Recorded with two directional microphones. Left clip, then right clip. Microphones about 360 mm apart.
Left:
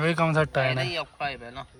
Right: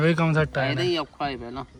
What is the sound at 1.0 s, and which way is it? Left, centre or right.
Speech, right.